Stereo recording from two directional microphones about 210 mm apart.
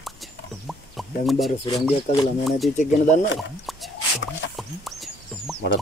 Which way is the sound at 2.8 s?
35° left (ahead or behind).